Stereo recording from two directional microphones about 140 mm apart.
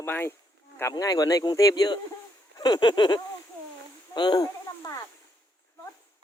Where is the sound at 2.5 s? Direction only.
30° left (ahead or behind).